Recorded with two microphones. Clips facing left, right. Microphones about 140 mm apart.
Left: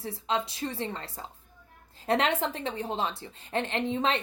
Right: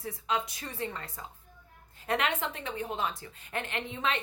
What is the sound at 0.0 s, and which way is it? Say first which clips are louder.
A woman's voice: left 2 dB; 30° left (ahead or behind).